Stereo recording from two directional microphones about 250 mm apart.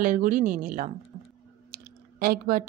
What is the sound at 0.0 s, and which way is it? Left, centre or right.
Speech, right.